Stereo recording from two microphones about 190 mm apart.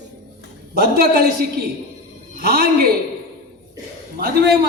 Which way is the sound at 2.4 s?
55° right (ahead or behind).